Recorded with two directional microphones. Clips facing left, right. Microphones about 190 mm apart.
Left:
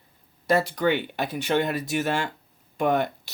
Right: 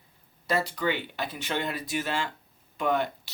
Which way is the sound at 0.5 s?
55° left (ahead or behind).